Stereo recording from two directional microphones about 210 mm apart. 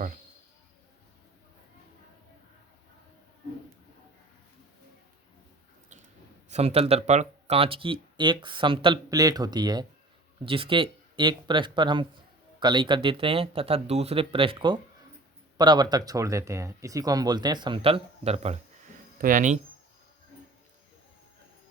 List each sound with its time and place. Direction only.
6.5 s speech: 30° right (ahead or behind)